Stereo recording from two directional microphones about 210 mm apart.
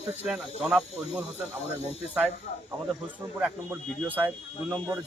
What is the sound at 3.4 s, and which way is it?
Speech, 5° right (ahead or behind).